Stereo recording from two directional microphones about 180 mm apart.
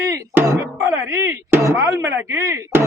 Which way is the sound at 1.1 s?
15° right (ahead or behind).